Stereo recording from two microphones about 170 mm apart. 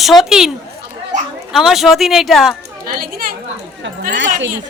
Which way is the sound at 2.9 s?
60° right (ahead or behind).